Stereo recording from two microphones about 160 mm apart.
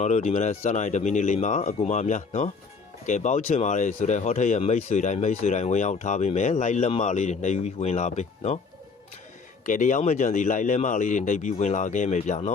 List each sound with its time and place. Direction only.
0.0 s speech: 45° left (ahead or behind)
9.6 s speech: 55° left (ahead or behind)